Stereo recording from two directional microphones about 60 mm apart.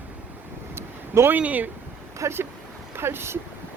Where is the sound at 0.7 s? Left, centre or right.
Right.